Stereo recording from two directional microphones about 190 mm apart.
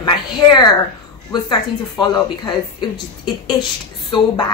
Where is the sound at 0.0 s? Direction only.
25° left (ahead or behind).